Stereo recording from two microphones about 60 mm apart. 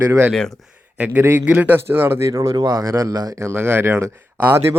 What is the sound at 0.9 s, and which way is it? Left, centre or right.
A man's voice, right.